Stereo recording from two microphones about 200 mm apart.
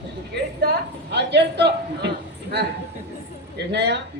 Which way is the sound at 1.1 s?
60° right (ahead or behind).